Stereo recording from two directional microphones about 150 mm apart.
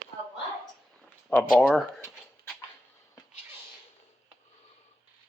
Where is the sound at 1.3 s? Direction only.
10° left (ahead or behind).